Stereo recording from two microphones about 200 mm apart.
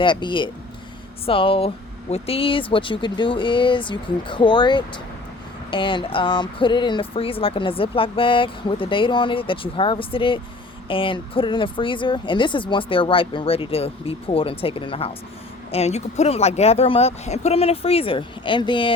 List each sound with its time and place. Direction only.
0.0 s speech: 25° left (ahead or behind)